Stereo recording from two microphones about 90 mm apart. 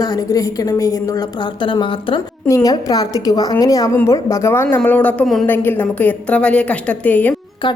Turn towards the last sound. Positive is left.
turn(degrees=20)  # may be behind; listen again after turning